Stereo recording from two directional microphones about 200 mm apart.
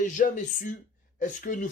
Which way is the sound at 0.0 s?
40° left (ahead or behind).